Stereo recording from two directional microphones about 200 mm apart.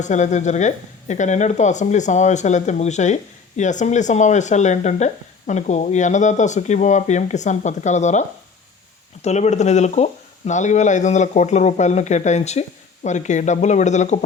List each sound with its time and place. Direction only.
0.0 s speech: 35° left (ahead or behind)
9.2 s speech: 35° left (ahead or behind)